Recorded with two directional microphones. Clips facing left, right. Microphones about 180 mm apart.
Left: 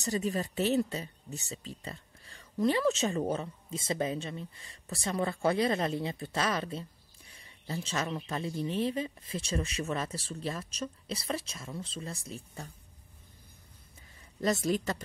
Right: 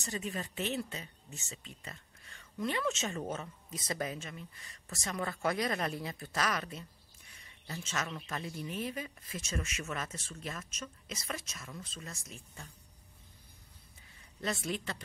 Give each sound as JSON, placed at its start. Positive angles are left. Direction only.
{"t": 0.0, "sound": "speech", "side_deg": 35}
{"t": 14.4, "sound": "speech", "side_deg": 40}